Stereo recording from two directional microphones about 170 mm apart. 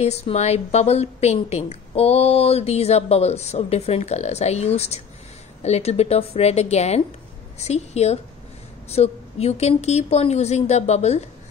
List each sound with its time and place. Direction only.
0.0 s a woman's voice: 40° left (ahead or behind)